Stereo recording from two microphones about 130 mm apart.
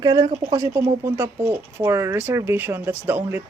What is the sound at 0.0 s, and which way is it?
Speech, 30° right (ahead or behind).